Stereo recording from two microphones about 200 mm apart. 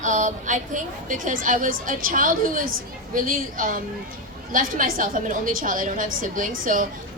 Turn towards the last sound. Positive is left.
turn(degrees=-40)  # may be behind; listen again after turning